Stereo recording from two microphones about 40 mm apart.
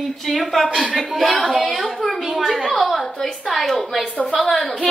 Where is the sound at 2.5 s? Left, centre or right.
Centre.